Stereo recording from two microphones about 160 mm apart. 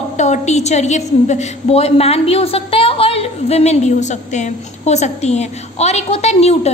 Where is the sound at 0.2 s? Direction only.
45° left (ahead or behind).